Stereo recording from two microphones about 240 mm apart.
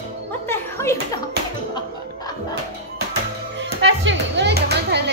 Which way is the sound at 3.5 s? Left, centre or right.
Right.